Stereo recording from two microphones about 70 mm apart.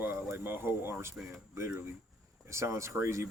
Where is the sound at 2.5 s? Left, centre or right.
Right.